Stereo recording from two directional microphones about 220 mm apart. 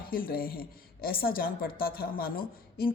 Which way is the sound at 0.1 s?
40° left (ahead or behind).